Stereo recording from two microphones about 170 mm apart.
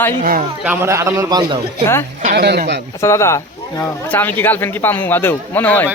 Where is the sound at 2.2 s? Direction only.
50° right (ahead or behind).